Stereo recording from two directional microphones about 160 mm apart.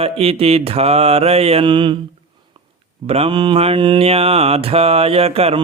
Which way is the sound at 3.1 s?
35° right (ahead or behind).